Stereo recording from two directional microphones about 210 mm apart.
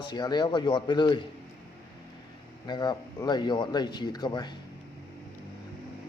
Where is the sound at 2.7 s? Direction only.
20° left (ahead or behind).